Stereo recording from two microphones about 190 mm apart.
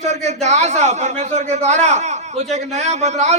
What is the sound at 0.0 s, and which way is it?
A man's voice, 35° right (ahead or behind).